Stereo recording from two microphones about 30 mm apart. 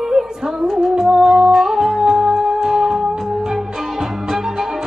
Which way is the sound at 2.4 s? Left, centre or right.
Centre.